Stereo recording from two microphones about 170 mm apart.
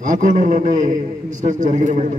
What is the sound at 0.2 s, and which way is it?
A man's voice, 50° right (ahead or behind).